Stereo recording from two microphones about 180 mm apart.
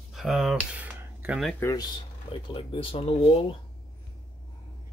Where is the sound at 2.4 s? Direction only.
30° left (ahead or behind).